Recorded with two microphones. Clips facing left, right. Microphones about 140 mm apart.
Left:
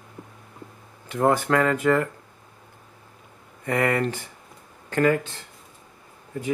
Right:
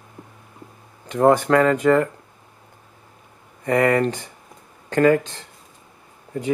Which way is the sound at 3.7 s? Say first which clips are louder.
Right 5 dB; 25° right (ahead or behind).